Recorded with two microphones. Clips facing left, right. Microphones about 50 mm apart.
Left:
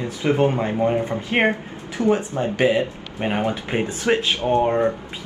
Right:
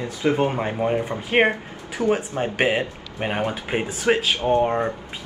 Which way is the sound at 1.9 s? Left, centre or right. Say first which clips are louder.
Left 2 dB; right.